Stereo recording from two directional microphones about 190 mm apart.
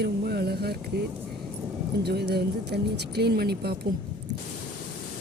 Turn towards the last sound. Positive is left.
turn(degrees=-55)  # may be behind; listen again after turning